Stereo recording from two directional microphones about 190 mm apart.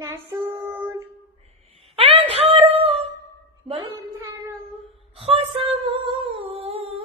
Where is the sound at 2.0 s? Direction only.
30° right (ahead or behind).